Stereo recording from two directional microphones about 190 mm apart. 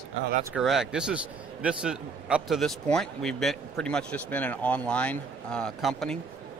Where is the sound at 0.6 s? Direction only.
5° right (ahead or behind).